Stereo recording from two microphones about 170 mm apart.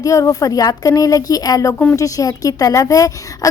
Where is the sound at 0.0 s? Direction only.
20° left (ahead or behind).